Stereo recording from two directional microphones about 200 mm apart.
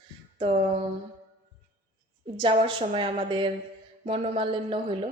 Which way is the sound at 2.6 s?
25° right (ahead or behind).